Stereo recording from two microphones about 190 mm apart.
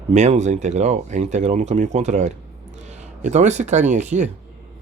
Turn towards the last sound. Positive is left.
turn(degrees=-40)  # may be behind; listen again after turning